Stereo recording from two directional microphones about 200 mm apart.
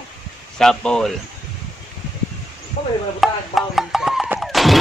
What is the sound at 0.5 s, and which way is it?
Speech, 5° left (ahead or behind).